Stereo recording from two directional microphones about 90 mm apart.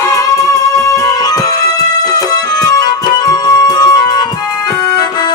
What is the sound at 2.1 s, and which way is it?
Music, 45° left (ahead or behind).